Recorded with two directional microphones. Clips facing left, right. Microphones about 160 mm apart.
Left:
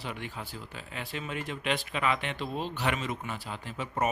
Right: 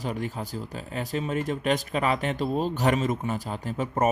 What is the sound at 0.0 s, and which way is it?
Speech, 40° right (ahead or behind).